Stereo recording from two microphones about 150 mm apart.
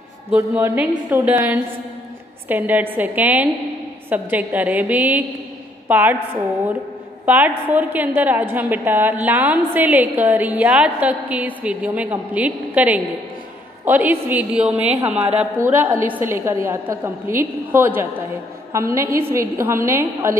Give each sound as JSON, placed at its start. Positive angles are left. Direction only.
{"t": 0.3, "sound": "a woman's voice", "side_deg": -15}
{"t": 7.2, "sound": "a woman's voice", "side_deg": -10}